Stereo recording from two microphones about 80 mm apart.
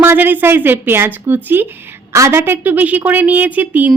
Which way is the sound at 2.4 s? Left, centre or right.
Right.